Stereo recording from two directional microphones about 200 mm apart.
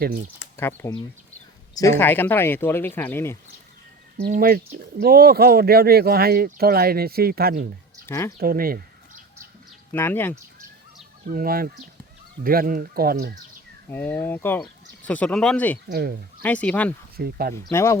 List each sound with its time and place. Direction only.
0.0 s speech: 45° right (ahead or behind)
0.5 s speech: 10° left (ahead or behind)
4.3 s speech: 45° right (ahead or behind)
8.0 s speech: 15° left (ahead or behind)
8.4 s a sound: 45° right (ahead or behind)
9.9 s speech: 10° left (ahead or behind)
11.3 s speech: 45° right (ahead or behind)
13.9 s speech: 10° left (ahead or behind)
15.9 s speech: 50° right (ahead or behind)
16.4 s speech: 5° left (ahead or behind)
17.2 s speech: 50° right (ahead or behind)
17.7 s speech: 15° left (ahead or behind)